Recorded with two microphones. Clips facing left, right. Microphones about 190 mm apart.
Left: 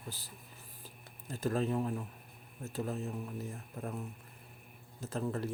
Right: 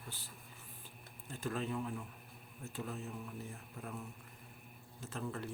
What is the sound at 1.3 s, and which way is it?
Speech, 40° left (ahead or behind).